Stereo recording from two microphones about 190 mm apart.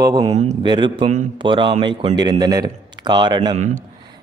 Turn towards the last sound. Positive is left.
turn(degrees=-40)  # may be behind; listen again after turning